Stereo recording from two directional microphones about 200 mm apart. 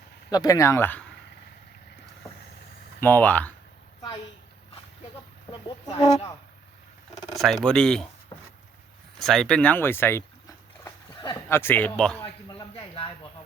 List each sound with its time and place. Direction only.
0.3 s speech: 20° left (ahead or behind)
3.0 s speech: 10° left (ahead or behind)
5.5 s speech: 20° left (ahead or behind)
7.3 s speech: centre (ahead or behind)
8.3 s a sound: 20° left (ahead or behind)
9.1 s speech: centre (ahead or behind)
12.2 s speech: 25° left (ahead or behind)